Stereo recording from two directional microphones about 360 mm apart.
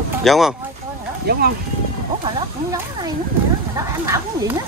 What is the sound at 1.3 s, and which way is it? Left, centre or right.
Speech, right.